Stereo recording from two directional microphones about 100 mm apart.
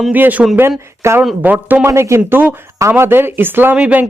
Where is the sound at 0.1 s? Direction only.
15° right (ahead or behind).